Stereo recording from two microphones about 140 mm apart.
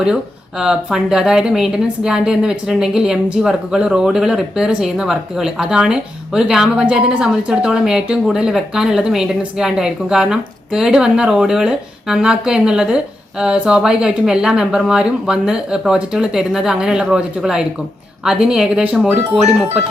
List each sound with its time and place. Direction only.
0.6 s a woman's voice: 5° right (ahead or behind)